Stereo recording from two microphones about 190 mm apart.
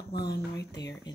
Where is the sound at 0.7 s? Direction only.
20° left (ahead or behind).